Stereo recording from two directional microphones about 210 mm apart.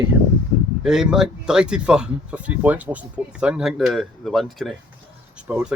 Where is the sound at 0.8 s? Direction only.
5° right (ahead or behind).